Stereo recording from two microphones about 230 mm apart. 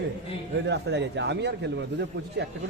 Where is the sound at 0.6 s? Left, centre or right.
Right.